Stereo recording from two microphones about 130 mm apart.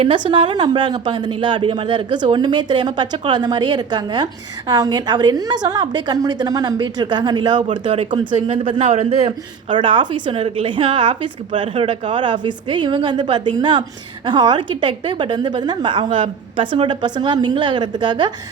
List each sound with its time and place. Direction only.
0.3 s a woman's voice: 40° right (ahead or behind)
7.7 s speech: 65° right (ahead or behind)
8.1 s a woman's voice: 40° right (ahead or behind)
8.8 s a woman's voice: 60° right (ahead or behind); by 18.3 s 35° right (ahead or behind)